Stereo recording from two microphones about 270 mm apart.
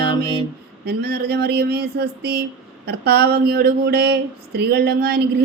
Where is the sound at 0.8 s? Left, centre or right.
Right.